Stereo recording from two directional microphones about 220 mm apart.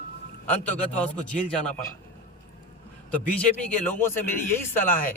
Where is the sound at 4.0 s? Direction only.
10° left (ahead or behind).